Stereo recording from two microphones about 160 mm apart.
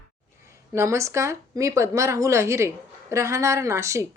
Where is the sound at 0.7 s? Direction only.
20° right (ahead or behind).